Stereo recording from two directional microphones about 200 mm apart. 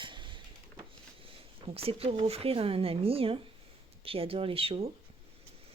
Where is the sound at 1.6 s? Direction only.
30° right (ahead or behind).